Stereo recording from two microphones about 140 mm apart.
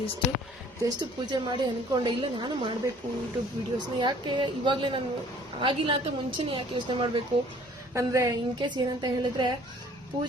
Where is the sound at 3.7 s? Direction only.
30° right (ahead or behind).